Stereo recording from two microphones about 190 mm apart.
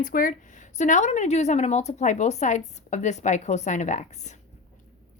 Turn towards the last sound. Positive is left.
turn(degrees=40)  # may be behind; listen again after turning